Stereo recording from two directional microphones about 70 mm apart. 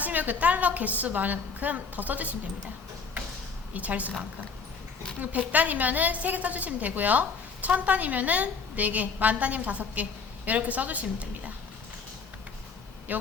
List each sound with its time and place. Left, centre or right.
0.0 s a woman's voice: right
3.8 s a woman's voice: right
5.2 s a woman's voice: right
13.1 s a woman's voice: right